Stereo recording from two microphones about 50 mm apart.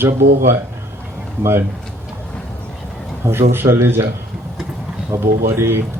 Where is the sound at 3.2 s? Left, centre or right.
Right.